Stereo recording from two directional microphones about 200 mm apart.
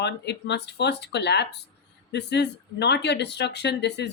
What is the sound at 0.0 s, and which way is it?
A woman's voice, 60° left (ahead or behind).